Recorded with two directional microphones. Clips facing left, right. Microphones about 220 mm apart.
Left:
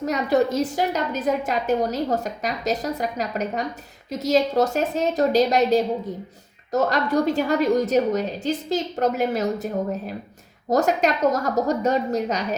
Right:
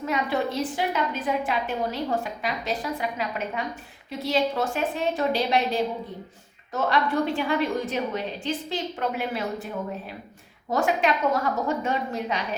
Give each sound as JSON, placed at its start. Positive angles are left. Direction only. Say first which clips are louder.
{"t": 0.0, "sound": "a woman's voice", "louder": "left 6 dB", "side_deg": 40}
{"t": 10.7, "sound": "a woman's voice", "louder": "left 4 dB", "side_deg": 40}